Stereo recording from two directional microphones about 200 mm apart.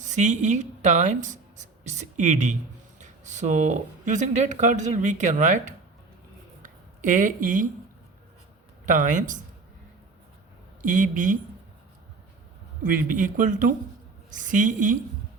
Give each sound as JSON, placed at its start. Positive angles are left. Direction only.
{"t": 0.0, "sound": "speech", "side_deg": -35}
{"t": 6.6, "sound": "a sound", "side_deg": -40}
{"t": 8.9, "sound": "speech", "side_deg": -40}
{"t": 10.8, "sound": "speech", "side_deg": -40}
{"t": 12.8, "sound": "speech", "side_deg": -40}